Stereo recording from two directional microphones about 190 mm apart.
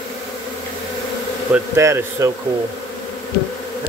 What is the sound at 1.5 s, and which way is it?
Speech, 15° right (ahead or behind).